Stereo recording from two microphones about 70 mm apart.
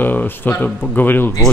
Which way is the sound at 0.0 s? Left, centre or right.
Left.